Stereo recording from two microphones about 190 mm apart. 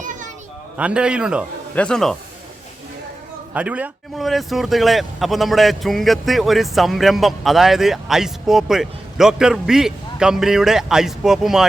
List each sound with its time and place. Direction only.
0.0 s a sound: 40° right (ahead or behind)
0.8 s speech: 5° right (ahead or behind)
3.5 s speech: 10° right (ahead or behind)